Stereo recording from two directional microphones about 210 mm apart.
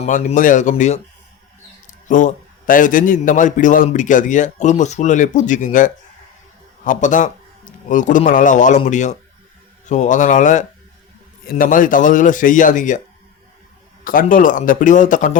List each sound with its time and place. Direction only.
0.0 s a man's voice: 35° left (ahead or behind)
2.0 s a man's voice: 40° left (ahead or behind)
14.0 s a man's voice: 40° left (ahead or behind)